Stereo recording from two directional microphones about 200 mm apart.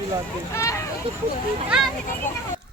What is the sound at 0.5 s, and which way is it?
Speech, 15° left (ahead or behind).